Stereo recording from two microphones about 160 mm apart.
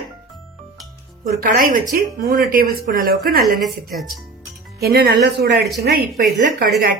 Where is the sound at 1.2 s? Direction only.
60° right (ahead or behind).